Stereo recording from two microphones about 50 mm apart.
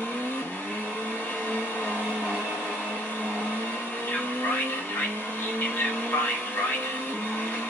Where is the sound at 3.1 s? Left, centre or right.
Left.